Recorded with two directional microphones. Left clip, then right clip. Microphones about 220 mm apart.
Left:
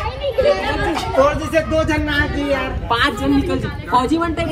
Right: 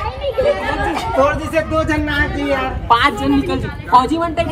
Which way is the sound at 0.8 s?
45° right (ahead or behind).